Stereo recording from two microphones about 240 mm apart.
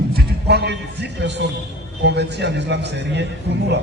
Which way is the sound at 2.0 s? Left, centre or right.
Right.